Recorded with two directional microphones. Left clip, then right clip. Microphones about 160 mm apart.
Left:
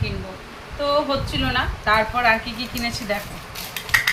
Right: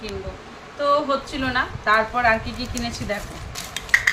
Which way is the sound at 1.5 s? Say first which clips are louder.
Right 1 dB; 20° right (ahead or behind).